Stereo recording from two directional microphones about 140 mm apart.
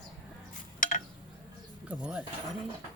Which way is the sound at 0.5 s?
70° left (ahead or behind).